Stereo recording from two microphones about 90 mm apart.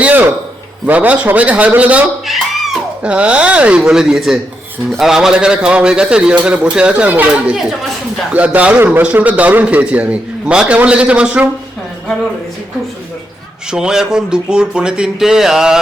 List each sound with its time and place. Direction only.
0.0 s a man's voice: 20° right (ahead or behind)
2.2 s a sound: centre (ahead or behind)
3.0 s a man's voice: 15° right (ahead or behind)
8.3 s a man's voice: 15° right (ahead or behind)
13.7 s a man's voice: 5° right (ahead or behind)